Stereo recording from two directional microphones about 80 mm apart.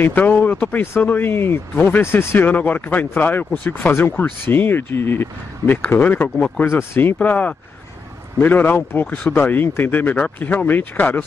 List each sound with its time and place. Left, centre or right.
0.0 s speech: left
7.2 s speech: centre